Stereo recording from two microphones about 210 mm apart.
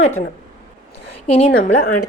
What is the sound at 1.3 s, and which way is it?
Speech, 30° left (ahead or behind).